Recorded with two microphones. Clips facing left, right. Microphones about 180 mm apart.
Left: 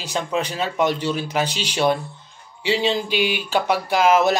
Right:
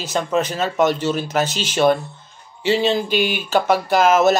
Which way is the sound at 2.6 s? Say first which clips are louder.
Right 3 dB; 50° right (ahead or behind).